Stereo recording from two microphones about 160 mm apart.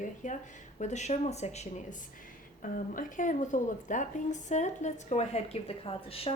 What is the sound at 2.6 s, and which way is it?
A woman's voice, 55° left (ahead or behind).